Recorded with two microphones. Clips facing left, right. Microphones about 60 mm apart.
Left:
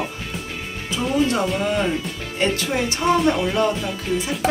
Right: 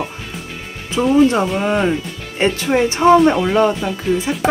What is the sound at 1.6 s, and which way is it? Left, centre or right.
Speech, right.